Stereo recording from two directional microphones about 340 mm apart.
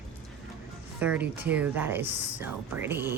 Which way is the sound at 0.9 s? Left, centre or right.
Centre.